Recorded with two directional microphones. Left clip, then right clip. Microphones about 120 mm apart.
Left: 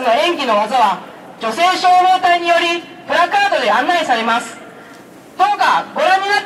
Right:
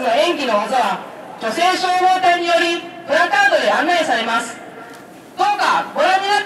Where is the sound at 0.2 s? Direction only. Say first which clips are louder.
Left 2 dB; 15° left (ahead or behind).